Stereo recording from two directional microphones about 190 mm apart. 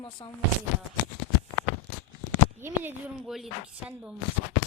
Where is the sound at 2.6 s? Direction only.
5° right (ahead or behind).